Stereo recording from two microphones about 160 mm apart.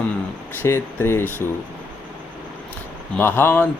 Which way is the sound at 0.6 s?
15° left (ahead or behind).